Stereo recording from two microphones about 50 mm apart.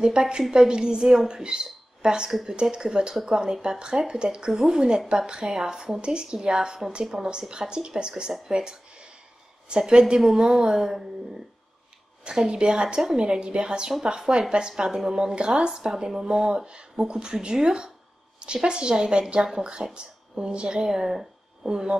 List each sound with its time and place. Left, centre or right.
0.0 s speech: centre
12.3 s speech: centre